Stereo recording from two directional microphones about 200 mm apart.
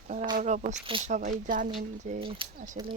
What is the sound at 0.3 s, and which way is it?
Speech, 35° right (ahead or behind).